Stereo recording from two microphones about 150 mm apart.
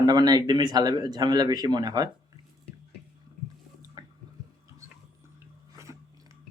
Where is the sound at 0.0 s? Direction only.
25° right (ahead or behind).